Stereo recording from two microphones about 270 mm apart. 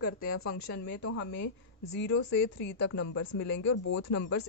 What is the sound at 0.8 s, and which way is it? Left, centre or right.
A woman's voice, left.